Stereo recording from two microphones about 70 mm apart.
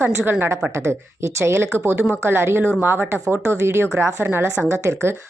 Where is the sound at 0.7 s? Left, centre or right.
Right.